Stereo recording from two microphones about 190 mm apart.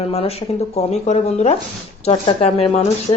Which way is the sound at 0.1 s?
30° left (ahead or behind).